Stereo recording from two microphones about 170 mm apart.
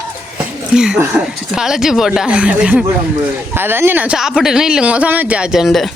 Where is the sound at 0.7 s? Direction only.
5° right (ahead or behind).